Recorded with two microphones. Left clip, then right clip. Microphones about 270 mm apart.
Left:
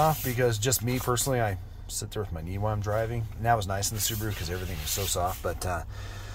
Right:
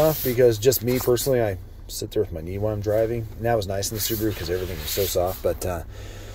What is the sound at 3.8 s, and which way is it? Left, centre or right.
Speech, centre.